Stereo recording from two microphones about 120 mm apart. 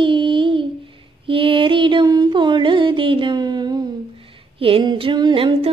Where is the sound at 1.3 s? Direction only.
45° right (ahead or behind).